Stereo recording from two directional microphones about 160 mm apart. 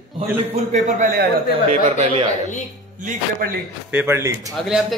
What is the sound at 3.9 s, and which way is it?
Speech, 15° right (ahead or behind).